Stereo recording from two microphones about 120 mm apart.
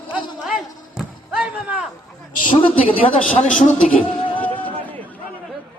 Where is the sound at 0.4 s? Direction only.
5° right (ahead or behind).